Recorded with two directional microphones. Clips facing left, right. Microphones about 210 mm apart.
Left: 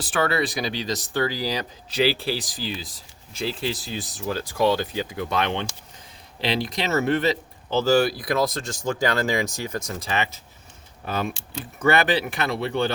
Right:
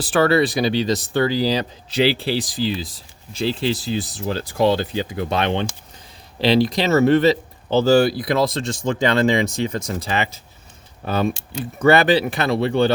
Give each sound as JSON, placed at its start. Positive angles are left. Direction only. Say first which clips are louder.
{"t": 0.0, "sound": "speech", "louder": "right 7 dB", "side_deg": -35}